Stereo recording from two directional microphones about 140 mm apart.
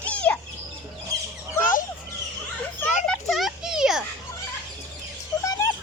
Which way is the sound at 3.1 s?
Centre (ahead or behind).